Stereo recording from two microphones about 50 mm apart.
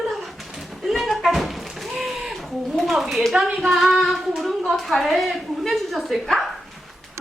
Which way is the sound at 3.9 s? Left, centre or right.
Centre.